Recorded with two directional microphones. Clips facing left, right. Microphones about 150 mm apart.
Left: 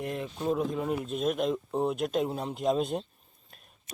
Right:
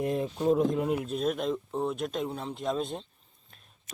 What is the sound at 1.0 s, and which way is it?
Speech, 5° left (ahead or behind).